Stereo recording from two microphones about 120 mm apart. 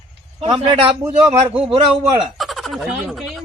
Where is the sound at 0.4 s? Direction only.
45° right (ahead or behind).